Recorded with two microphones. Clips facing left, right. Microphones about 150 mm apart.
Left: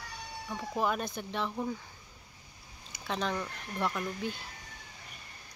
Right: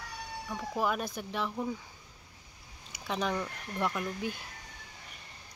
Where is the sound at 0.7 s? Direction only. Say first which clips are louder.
Even; 5° right (ahead or behind).